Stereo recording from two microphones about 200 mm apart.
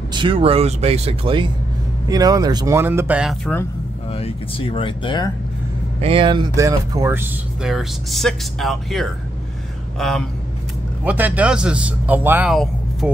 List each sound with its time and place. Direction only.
0.1 s speech: 25° right (ahead or behind); by 3.5 s 5° right (ahead or behind)
4.1 s speech: 30° left (ahead or behind)
5.9 s a man's voice: 30° right (ahead or behind); by 13.2 s 5° right (ahead or behind)